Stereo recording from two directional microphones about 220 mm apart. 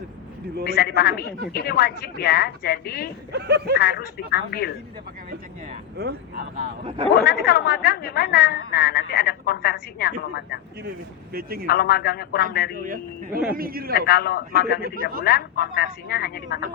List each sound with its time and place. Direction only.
0.7 s a woman's voice: 45° left (ahead or behind)
3.3 s speech: 50° right (ahead or behind)
3.8 s a woman's voice: 45° left (ahead or behind)
6.0 s speech: 45° right (ahead or behind)
6.6 s a man's voice: 30° right (ahead or behind)
7.3 s a woman's voice: 45° left (ahead or behind)
11.3 s speech: 40° right (ahead or behind)
11.6 s a woman's voice: 45° left (ahead or behind)
12.8 s a man's voice: 40° right (ahead or behind)
13.9 s a woman's voice: 45° left (ahead or behind)
14.8 s speech: 40° right (ahead or behind)
15.2 s a woman's voice: 45° left (ahead or behind)